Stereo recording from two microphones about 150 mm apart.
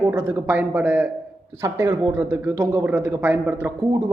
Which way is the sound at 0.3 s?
15° right (ahead or behind).